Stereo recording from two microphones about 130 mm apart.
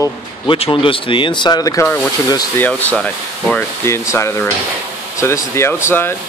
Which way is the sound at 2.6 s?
10° left (ahead or behind).